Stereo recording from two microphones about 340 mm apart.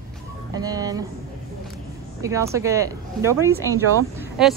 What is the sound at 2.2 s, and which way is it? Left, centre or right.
Speech, centre.